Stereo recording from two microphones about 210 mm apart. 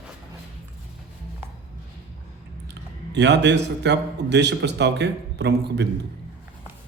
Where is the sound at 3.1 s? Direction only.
55° right (ahead or behind).